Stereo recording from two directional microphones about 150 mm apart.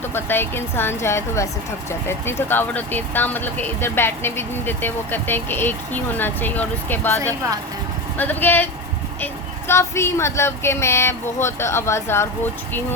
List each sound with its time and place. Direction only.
0.1 s speech: 15° left (ahead or behind)
8.2 s speech: 15° left (ahead or behind)